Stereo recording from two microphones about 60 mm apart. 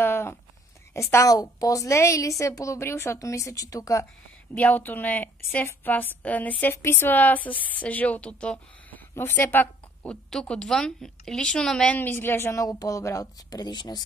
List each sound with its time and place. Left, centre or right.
0.0 s a sound: left
1.2 s a woman's voice: left
2.8 s a woman's voice: left
3.2 s speech: left
4.6 s a woman's voice: left
6.7 s a woman's voice: left; by 9.0 s centre
9.2 s a woman's voice: left
10.4 s a woman's voice: centre
10.7 s a woman's voice: centre
11.9 s a woman's voice: left
12.6 s speech: left